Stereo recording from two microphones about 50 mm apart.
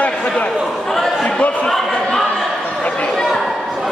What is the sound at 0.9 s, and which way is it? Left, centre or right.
Speech, centre.